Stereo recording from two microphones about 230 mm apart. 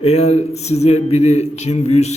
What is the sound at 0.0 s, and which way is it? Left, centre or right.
A man's voice, left.